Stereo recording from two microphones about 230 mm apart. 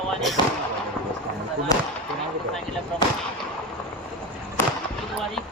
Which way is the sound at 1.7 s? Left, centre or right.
Centre.